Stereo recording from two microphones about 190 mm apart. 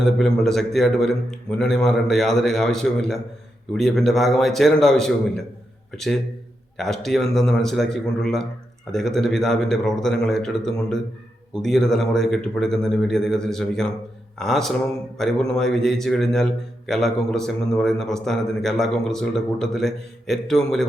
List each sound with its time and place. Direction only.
0.0 s a man's voice: centre (ahead or behind)
6.7 s a man's voice: centre (ahead or behind)